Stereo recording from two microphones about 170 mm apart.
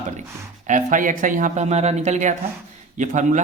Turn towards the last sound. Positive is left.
turn(degrees=-45)  # may be behind; listen again after turning